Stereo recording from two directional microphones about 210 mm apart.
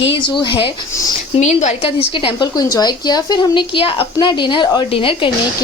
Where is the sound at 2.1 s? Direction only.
20° left (ahead or behind).